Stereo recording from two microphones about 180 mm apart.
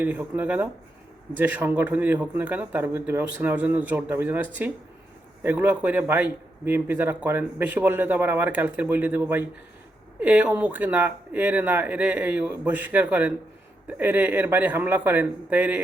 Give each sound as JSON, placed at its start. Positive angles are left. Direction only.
{"t": 0.0, "sound": "a man's voice", "side_deg": -10}